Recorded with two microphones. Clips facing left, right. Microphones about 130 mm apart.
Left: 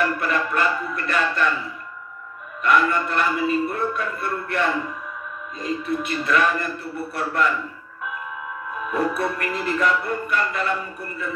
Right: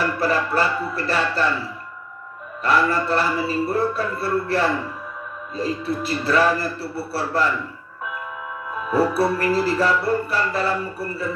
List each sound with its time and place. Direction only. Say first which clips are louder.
0.0 s music: right 1 dB; 35° right (ahead or behind)
2.6 s music: even; 30° right (ahead or behind)
8.9 s music: right 5 dB; 30° right (ahead or behind)